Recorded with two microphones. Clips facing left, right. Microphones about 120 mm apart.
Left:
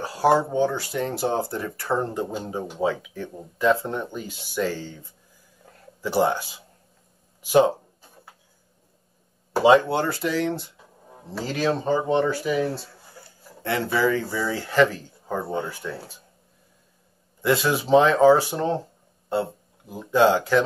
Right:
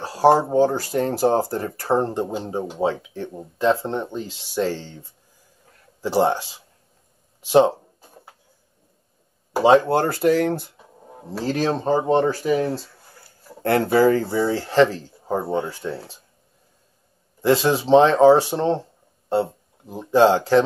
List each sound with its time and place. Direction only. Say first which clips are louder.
0.0 s speech: right 4 dB; 30° right (ahead or behind)
9.7 s speech: right 2 dB; 40° right (ahead or behind)
11.4 s speech: right 2 dB; 40° right (ahead or behind)
14.2 s speech: right 6 dB; 25° right (ahead or behind)
17.4 s speech: right 4 dB; 30° right (ahead or behind)
19.9 s speech: right 3 dB; 30° right (ahead or behind)